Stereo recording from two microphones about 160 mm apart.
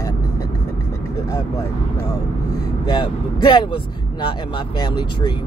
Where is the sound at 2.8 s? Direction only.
30° left (ahead or behind).